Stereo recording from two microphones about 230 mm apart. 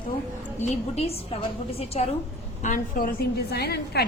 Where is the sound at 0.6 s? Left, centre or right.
Left.